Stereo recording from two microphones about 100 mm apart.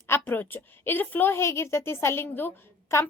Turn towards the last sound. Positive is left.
turn(degrees=25)  # may be behind; listen again after turning